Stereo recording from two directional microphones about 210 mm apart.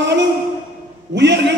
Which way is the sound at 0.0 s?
55° right (ahead or behind).